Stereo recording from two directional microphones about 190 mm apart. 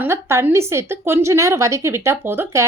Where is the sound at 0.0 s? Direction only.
15° right (ahead or behind).